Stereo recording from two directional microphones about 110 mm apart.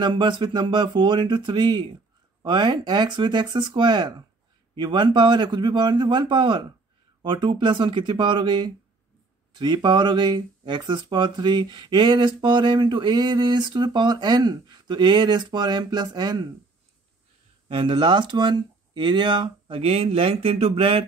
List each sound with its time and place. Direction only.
0.0 s speech: 45° right (ahead or behind)
17.6 s speech: 50° right (ahead or behind)